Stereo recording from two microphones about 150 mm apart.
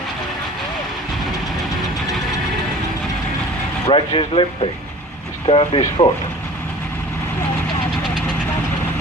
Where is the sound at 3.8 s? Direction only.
35° left (ahead or behind).